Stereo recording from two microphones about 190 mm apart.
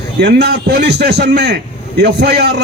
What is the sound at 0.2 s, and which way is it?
A man's voice, 60° right (ahead or behind).